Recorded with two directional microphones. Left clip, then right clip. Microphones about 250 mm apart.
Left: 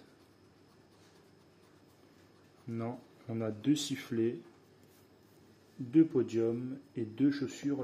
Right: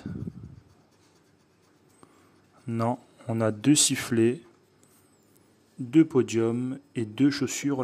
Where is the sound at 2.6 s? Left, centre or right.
Right.